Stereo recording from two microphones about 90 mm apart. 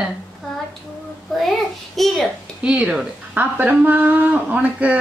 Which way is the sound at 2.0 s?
Centre (ahead or behind).